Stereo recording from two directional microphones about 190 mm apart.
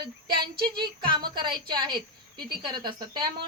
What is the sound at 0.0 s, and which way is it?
A woman's voice, 25° right (ahead or behind).